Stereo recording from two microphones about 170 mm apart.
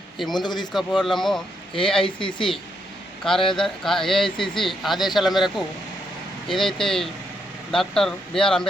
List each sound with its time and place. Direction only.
0.2 s speech: centre (ahead or behind)
0.4 s speech: 25° left (ahead or behind)
0.7 s speech: centre (ahead or behind)
2.0 s speech: 30° left (ahead or behind)
3.2 s speech: centre (ahead or behind)